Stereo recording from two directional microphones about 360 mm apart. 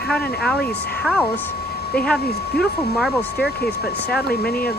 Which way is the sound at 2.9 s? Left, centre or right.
Centre.